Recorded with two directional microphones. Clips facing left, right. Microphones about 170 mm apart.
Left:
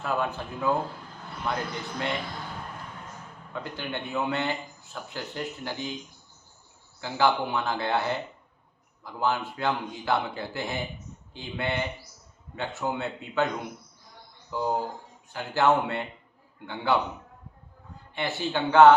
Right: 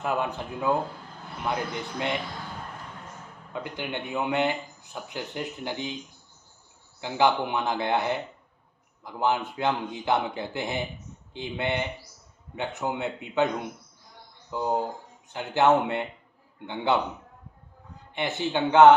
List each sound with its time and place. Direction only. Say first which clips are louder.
0.0 s speech: right 1 dB; 20° right (ahead or behind)
3.5 s speech: right 1 dB; 15° right (ahead or behind)
7.0 s speech: right 1 dB; 20° right (ahead or behind)
14.5 s a man's voice: right 1 dB; 20° right (ahead or behind)